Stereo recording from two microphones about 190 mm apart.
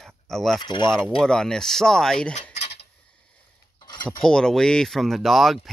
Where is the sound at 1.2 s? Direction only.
5° left (ahead or behind).